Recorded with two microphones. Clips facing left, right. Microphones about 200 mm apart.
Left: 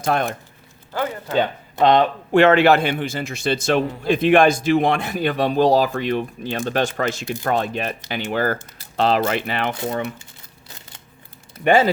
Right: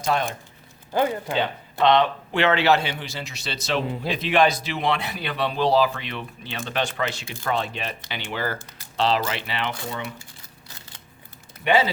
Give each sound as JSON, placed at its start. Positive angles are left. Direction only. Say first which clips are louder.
{"t": 0.0, "sound": "speech", "louder": "left 3 dB", "side_deg": 55}
{"t": 0.9, "sound": "speech", "louder": "right 2 dB", "side_deg": -15}
{"t": 1.8, "sound": "speech", "louder": "left 3 dB", "side_deg": 45}
{"t": 11.6, "sound": "speech", "louder": "left 5 dB", "side_deg": 50}